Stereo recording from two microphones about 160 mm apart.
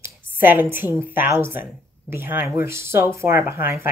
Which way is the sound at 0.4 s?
10° right (ahead or behind).